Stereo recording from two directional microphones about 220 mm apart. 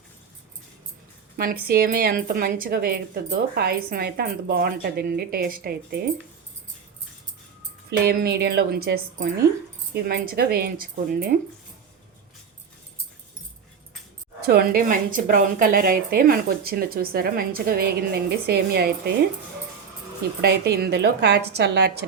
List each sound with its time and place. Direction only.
1.4 s a woman's voice: 45° right (ahead or behind)
7.9 s a woman's voice: 45° right (ahead or behind)
14.4 s a woman's voice: 45° right (ahead or behind)
20.4 s a woman's voice: 45° right (ahead or behind)